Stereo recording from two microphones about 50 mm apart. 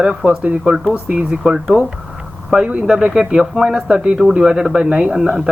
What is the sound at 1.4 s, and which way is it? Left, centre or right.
Speech, centre.